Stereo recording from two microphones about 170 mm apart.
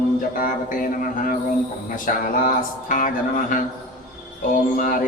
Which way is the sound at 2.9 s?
50° left (ahead or behind).